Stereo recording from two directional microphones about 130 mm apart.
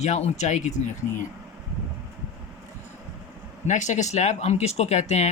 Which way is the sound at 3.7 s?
65° left (ahead or behind).